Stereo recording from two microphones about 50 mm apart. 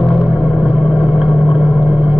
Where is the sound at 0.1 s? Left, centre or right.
Right.